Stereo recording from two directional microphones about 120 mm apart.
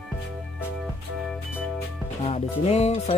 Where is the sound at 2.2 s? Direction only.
60° left (ahead or behind).